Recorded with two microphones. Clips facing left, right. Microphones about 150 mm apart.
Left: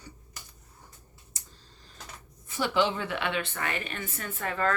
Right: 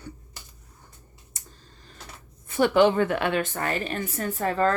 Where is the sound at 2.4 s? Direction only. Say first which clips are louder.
Right 8 dB; 55° right (ahead or behind).